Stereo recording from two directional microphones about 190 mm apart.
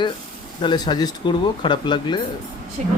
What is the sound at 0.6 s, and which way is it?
Speech, 25° left (ahead or behind).